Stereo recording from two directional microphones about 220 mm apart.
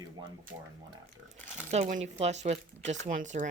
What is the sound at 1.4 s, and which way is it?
Speech, 30° right (ahead or behind).